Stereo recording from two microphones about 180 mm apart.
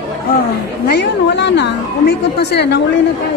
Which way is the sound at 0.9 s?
70° left (ahead or behind).